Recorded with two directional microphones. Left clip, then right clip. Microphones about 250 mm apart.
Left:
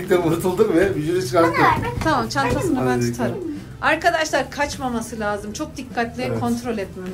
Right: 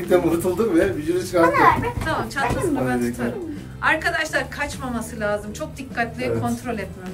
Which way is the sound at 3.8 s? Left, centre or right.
Centre.